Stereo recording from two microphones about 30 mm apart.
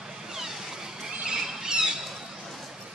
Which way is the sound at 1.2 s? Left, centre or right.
Right.